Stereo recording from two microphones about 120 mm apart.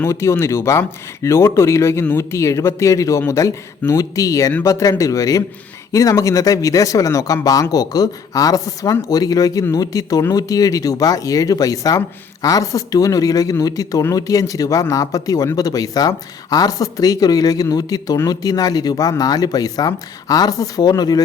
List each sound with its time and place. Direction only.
0.0 s speech: 20° left (ahead or behind)